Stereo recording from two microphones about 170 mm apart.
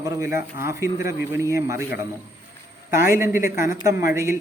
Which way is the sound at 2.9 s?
15° right (ahead or behind).